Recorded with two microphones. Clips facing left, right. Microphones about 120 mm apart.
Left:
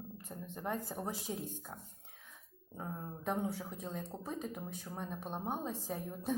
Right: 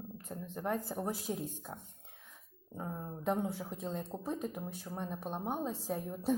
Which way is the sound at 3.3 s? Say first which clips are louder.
Right 3 dB; 15° right (ahead or behind).